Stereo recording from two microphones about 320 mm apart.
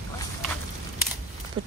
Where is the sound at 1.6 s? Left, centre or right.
Centre.